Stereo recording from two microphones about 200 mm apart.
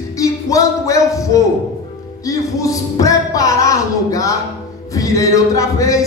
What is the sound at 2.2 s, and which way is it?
Speech, 15° left (ahead or behind).